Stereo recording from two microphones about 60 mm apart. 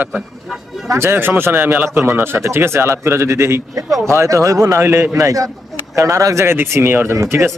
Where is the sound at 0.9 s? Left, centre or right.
Right.